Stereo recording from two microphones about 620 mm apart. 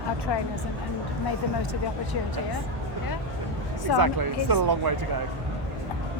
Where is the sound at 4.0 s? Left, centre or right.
Right.